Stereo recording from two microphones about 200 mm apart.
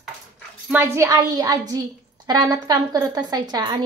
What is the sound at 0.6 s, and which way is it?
A woman's voice, 10° right (ahead or behind).